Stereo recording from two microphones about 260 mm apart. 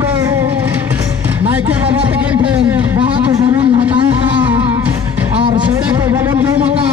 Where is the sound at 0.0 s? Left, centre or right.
Centre.